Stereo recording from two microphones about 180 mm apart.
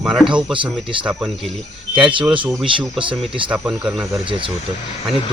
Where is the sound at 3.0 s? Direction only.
30° right (ahead or behind).